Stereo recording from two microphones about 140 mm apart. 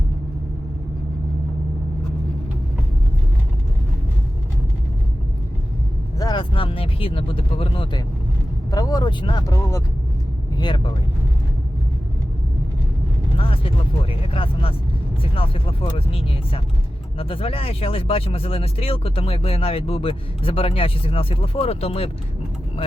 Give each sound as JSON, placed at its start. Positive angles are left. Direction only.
{"t": 6.1, "sound": "speech", "side_deg": 30}
{"t": 8.7, "sound": "speech", "side_deg": 25}
{"t": 13.3, "sound": "speech", "side_deg": 40}